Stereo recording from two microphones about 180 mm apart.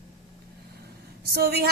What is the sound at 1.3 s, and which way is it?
Speech, 60° right (ahead or behind).